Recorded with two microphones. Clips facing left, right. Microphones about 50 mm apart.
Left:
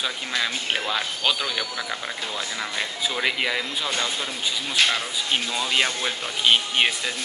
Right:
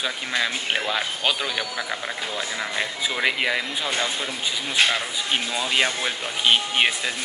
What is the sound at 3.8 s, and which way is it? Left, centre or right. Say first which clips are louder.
Speech: right 1 dB; right.